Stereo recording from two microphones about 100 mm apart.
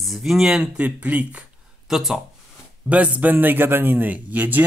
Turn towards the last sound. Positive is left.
turn(degrees=-15)  # may be behind; listen again after turning